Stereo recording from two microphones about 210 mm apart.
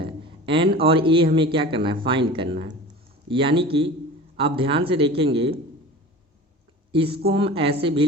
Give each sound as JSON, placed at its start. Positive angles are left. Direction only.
{"t": 0.0, "sound": "a sound", "side_deg": -25}
{"t": 0.8, "sound": "speech", "side_deg": -25}
{"t": 6.9, "sound": "speech", "side_deg": -25}